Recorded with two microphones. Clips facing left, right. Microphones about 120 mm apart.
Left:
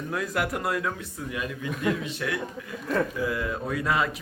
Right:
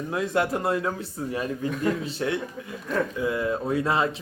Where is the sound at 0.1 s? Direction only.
25° right (ahead or behind).